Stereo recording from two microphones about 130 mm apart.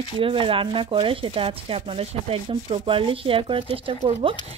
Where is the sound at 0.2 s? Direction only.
45° right (ahead or behind).